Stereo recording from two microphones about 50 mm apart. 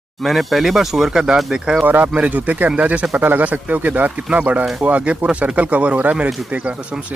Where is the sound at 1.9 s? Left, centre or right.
Right.